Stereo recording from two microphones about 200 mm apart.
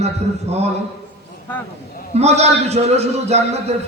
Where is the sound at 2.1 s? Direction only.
30° right (ahead or behind).